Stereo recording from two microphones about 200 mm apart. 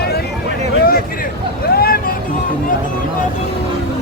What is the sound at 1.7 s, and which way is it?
Vehicle, 50° left (ahead or behind).